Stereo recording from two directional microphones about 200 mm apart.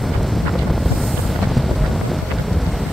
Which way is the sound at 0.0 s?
Centre (ahead or behind).